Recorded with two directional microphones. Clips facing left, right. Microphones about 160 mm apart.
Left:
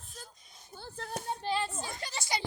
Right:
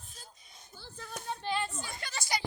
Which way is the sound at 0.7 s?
55° left (ahead or behind).